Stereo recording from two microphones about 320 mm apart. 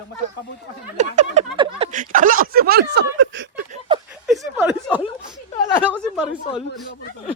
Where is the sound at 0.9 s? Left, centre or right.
Right.